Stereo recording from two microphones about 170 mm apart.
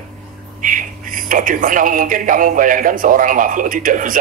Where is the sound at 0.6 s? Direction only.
50° right (ahead or behind).